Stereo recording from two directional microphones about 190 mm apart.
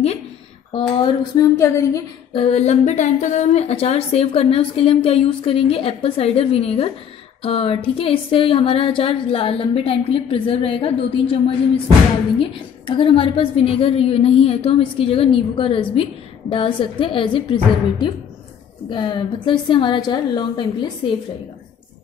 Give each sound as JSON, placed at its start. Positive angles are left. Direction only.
{"t": 0.7, "sound": "a woman's voice", "side_deg": 25}
{"t": 1.6, "sound": "a woman's voice", "side_deg": 15}
{"t": 2.3, "sound": "a woman's voice", "side_deg": 30}
{"t": 18.9, "sound": "a woman's voice", "side_deg": 25}